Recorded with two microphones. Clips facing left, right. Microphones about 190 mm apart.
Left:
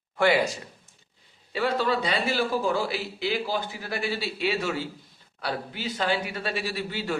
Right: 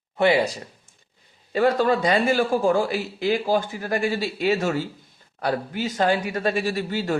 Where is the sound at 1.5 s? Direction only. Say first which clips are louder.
Right 6 dB; 45° right (ahead or behind).